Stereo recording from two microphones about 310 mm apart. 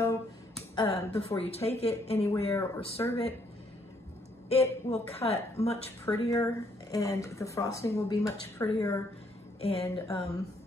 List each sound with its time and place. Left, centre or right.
0.0 s speech: centre
4.5 s speech: centre